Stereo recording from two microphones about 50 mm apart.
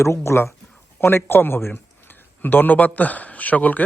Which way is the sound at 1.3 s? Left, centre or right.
Left.